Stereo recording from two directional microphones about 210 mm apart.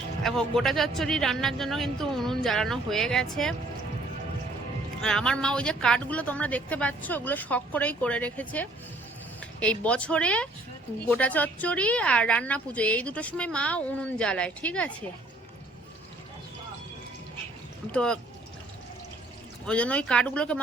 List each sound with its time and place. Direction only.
0.2 s speech: centre (ahead or behind)
5.0 s a woman's voice: 5° left (ahead or behind)
17.9 s speech: 5° left (ahead or behind)
19.6 s speech: 5° left (ahead or behind)